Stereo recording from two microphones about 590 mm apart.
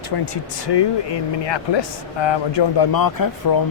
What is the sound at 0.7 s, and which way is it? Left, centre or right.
Speech, left.